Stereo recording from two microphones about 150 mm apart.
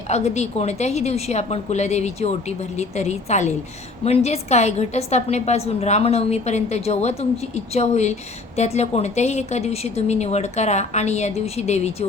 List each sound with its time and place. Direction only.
0.1 s a woman's voice: 45° left (ahead or behind)